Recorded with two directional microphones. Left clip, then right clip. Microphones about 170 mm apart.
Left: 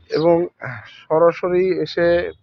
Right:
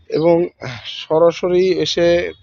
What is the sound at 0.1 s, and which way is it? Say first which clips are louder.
Speech: right 2 dB; 25° right (ahead or behind).